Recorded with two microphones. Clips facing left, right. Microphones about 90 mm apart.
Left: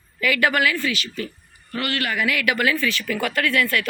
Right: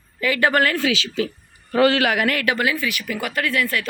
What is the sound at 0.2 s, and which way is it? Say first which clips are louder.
Speech: right 2 dB; 30° right (ahead or behind).